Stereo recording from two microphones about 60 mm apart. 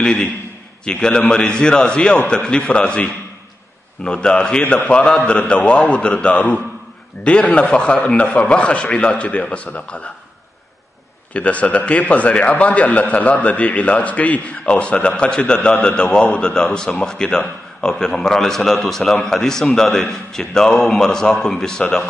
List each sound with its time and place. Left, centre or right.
0.0 s a man's voice: centre
11.3 s a man's voice: left